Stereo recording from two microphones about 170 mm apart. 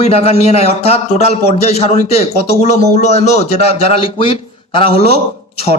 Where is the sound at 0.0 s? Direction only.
35° left (ahead or behind).